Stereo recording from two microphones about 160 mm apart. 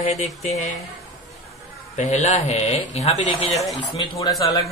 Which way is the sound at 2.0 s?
45° left (ahead or behind).